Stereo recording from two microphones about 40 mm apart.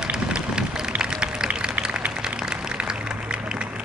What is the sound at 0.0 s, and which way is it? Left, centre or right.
Run, right.